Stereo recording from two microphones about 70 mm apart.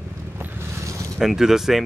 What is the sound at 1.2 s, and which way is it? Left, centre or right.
Speech, centre.